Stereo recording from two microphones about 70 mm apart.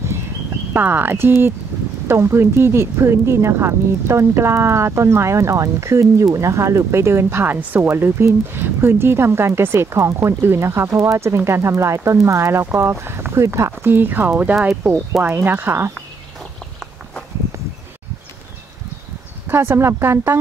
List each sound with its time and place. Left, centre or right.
0.7 s speech: right
19.4 s speech: right